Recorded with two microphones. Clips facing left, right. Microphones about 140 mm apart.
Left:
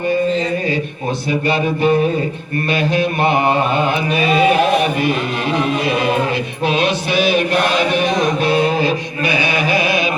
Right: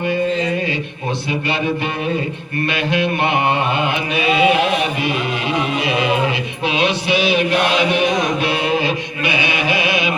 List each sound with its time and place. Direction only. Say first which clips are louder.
1.3 s music: left 3 dB; 40° left (ahead or behind)
2.9 s mantra: left 1 dB; 40° left (ahead or behind)
6.7 s chant: even; 45° left (ahead or behind)